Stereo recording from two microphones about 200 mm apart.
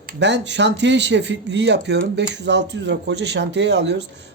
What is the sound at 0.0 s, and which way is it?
Speech, 50° right (ahead or behind).